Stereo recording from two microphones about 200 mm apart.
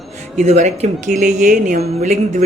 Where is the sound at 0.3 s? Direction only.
35° right (ahead or behind).